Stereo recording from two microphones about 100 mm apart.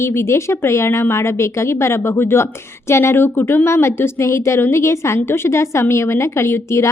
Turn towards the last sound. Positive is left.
turn(degrees=25)  # may be behind; listen again after turning